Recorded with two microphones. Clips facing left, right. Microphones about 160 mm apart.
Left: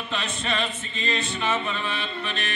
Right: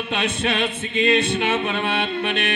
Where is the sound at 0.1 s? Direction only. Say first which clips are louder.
Right 5 dB; 65° right (ahead or behind).